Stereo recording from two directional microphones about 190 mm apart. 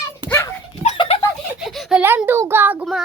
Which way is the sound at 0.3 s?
15° left (ahead or behind).